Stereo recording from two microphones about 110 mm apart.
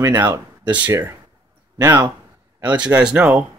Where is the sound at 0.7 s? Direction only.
15° right (ahead or behind).